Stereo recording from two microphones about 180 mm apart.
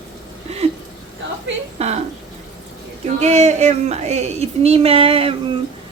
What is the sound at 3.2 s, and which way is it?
A woman's voice, 35° right (ahead or behind).